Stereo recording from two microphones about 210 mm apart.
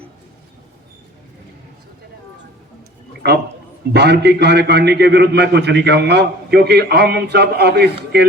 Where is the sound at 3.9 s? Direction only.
55° right (ahead or behind).